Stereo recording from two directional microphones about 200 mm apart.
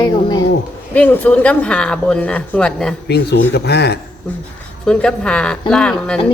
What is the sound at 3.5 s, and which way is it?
Speech, 55° left (ahead or behind).